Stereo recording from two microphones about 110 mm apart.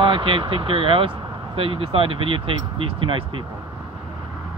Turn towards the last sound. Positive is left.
turn(degrees=-55)  # may be behind; listen again after turning